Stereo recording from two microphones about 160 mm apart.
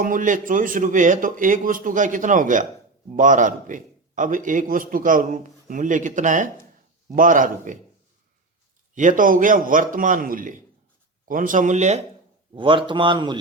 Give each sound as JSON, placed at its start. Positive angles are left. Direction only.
{"t": 0.0, "sound": "a man's voice", "side_deg": -55}
{"t": 9.0, "sound": "a man's voice", "side_deg": -55}
{"t": 12.5, "sound": "speech", "side_deg": -30}